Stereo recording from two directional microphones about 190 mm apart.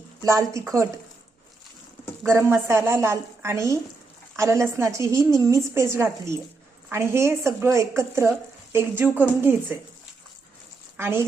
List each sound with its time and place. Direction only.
0.3 s a woman's voice: 15° right (ahead or behind)
2.2 s a woman's voice: 15° right (ahead or behind)
10.9 s a woman's voice: 10° right (ahead or behind)